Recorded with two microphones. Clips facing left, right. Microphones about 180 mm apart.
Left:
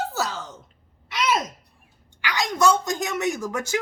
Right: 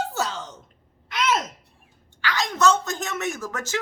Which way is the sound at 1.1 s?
10° left (ahead or behind).